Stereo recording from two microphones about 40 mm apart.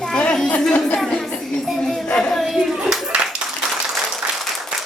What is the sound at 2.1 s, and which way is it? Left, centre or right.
Music, centre.